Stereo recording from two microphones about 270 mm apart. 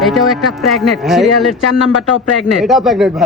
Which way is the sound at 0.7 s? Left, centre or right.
Centre.